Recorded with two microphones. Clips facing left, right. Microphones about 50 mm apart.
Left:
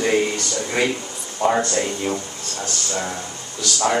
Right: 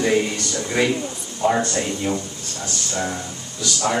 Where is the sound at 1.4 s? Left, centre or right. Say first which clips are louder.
Even; left.